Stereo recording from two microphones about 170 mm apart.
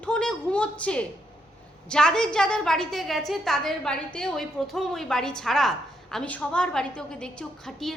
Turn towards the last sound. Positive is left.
turn(degrees=0)  # may be behind; listen again after turning